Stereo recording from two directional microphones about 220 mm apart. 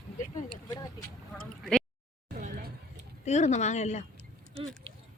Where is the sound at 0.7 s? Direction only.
15° left (ahead or behind).